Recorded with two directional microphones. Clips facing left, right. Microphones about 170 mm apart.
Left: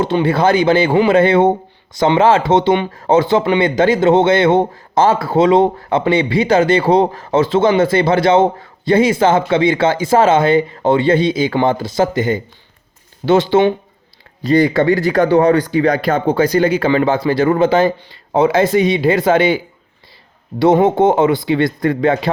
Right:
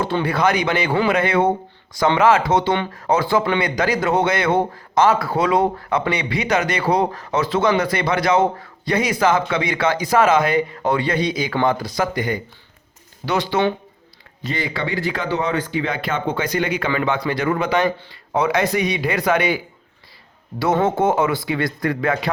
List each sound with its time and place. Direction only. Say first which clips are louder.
0.0 s speech: left 5 dB; 25° left (ahead or behind)
14.4 s speech: left 13 dB; 40° left (ahead or behind); by 22.3 s 25° left (ahead or behind)